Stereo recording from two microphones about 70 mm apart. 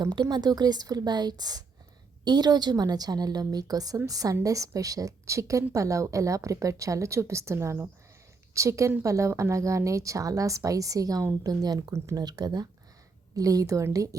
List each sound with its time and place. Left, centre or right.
0.0 s a woman's voice: right
2.2 s a woman's voice: right
11.4 s a woman's voice: right
13.3 s a woman's voice: right